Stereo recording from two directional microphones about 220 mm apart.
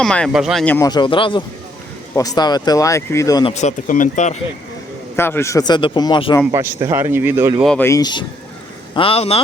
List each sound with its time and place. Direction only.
0.0 s speech: 5° left (ahead or behind)
0.9 s speech: 20° left (ahead or behind)
3.5 s speech: 30° left (ahead or behind)
5.1 s speech: 10° left (ahead or behind)
6.5 s a man's voice: 10° right (ahead or behind)
7.6 s speech: 5° left (ahead or behind); by 9.4 s 25° left (ahead or behind)